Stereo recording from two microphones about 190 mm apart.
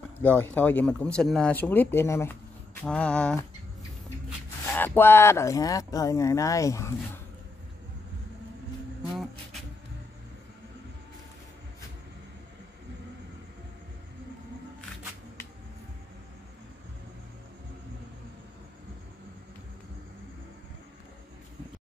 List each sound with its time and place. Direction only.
0.2 s speech: 10° left (ahead or behind)
4.6 s speech: 10° left (ahead or behind)
9.1 s music: centre (ahead or behind)